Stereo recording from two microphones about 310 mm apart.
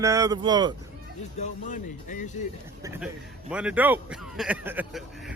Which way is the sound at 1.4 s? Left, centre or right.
Left.